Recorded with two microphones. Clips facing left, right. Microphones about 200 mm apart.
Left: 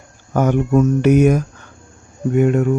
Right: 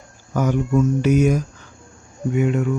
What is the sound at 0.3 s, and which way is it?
Speech, 60° left (ahead or behind).